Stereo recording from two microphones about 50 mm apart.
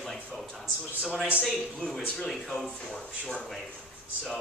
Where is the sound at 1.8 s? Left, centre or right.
Left.